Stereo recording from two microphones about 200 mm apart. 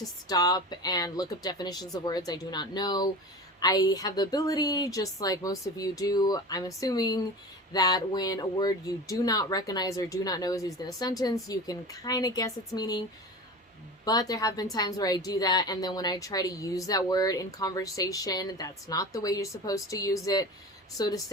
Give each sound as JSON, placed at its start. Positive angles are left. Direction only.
{"t": 0.0, "sound": "a woman's voice", "side_deg": 20}
{"t": 14.0, "sound": "a woman's voice", "side_deg": 20}